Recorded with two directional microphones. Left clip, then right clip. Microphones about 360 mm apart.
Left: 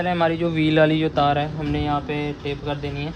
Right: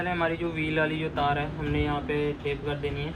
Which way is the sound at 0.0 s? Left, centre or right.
Left.